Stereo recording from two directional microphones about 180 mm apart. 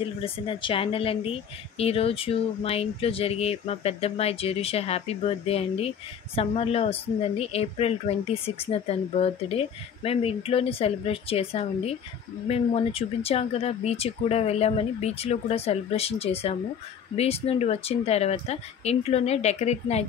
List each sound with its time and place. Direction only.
0.2 s speech: 30° left (ahead or behind)